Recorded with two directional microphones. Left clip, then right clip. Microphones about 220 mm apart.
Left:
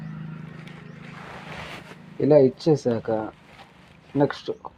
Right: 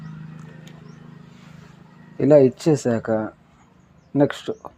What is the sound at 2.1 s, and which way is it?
Speech, 50° right (ahead or behind).